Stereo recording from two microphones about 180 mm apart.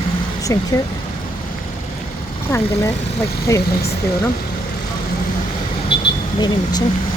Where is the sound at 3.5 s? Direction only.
15° left (ahead or behind).